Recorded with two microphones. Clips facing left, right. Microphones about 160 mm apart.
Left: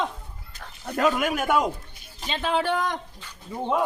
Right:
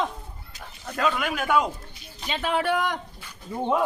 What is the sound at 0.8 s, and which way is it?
Speech, 40° left (ahead or behind).